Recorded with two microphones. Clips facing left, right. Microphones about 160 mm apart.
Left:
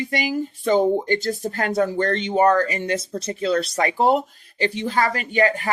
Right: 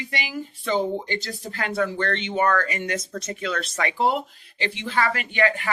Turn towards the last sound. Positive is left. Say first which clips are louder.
# left 3 dB
turn(degrees=40)  # may be behind; listen again after turning